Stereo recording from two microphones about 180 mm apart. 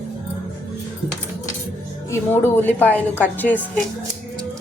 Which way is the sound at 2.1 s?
10° left (ahead or behind).